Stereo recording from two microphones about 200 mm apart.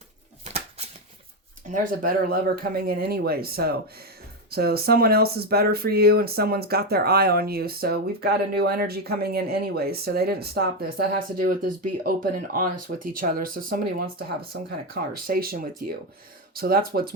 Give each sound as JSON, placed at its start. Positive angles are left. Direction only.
{"t": 1.7, "sound": "speech", "side_deg": -40}
{"t": 15.3, "sound": "speech", "side_deg": -45}